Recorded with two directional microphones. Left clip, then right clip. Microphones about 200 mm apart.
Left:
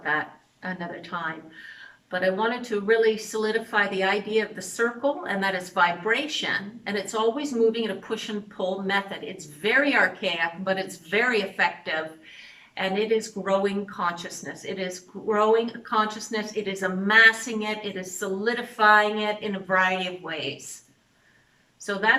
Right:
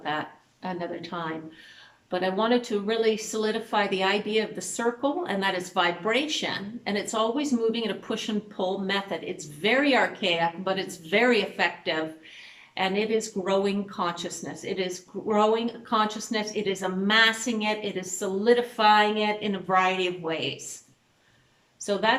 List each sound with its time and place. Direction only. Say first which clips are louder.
0.1 s speech: left 5 dB; 15° right (ahead or behind)
21.9 s speech: right 2 dB; 15° right (ahead or behind)